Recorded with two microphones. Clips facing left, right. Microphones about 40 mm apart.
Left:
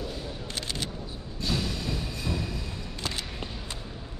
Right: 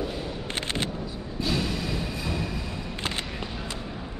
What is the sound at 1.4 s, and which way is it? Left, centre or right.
Music, centre.